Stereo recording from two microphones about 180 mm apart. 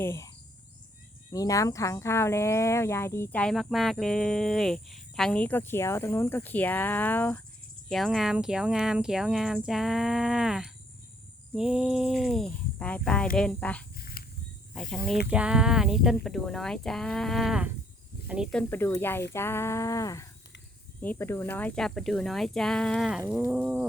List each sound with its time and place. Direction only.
0.0 s speech: 15° left (ahead or behind)
1.3 s speech: 20° left (ahead or behind)
7.9 s speech: centre (ahead or behind)
13.9 s a sound: 55° left (ahead or behind)
14.8 s speech: centre (ahead or behind)
18.7 s speech: 15° left (ahead or behind)
23.4 s a sound: 10° right (ahead or behind)